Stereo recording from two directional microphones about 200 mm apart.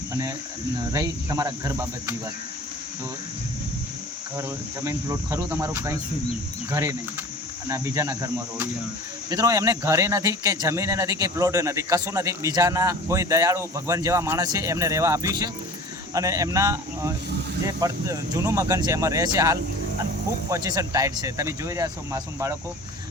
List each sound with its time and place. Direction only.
0.1 s speech: 15° right (ahead or behind)
4.4 s speech: 15° right (ahead or behind)